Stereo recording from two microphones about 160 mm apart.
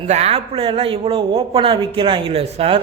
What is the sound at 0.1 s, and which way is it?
A man's voice, 40° right (ahead or behind).